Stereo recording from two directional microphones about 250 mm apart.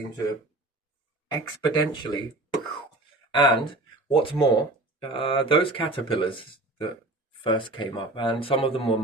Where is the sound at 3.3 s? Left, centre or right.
Centre.